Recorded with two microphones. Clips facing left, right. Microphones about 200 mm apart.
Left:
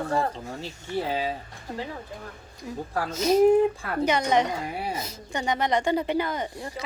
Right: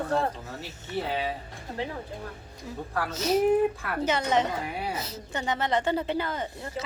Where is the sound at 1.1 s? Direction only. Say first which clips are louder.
Left 1 dB; 30° left (ahead or behind).